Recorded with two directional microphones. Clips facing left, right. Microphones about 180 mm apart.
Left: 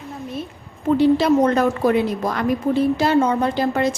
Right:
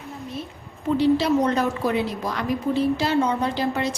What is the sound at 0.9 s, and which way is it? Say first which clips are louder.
A woman's voice: left 4 dB; 50° left (ahead or behind).